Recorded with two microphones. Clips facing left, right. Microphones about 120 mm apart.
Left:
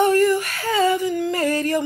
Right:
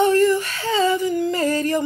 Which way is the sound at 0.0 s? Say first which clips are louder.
Even; 25° right (ahead or behind).